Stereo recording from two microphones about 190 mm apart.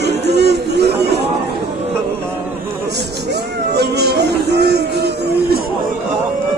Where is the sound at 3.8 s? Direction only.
60° right (ahead or behind).